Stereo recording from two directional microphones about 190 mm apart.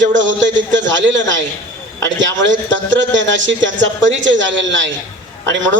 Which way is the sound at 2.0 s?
75° right (ahead or behind).